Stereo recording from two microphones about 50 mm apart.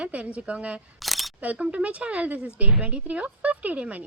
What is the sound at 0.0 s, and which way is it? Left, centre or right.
Speech, right.